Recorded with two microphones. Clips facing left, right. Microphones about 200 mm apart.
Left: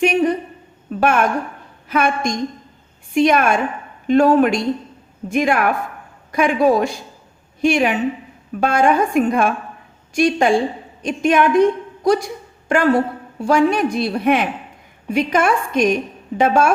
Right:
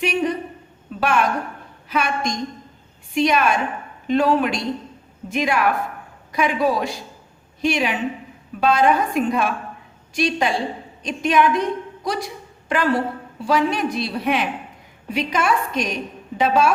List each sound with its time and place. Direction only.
0.0 s a woman's voice: 50° left (ahead or behind)
0.9 s a sound: 50° left (ahead or behind)
1.9 s a woman's voice: 50° left (ahead or behind)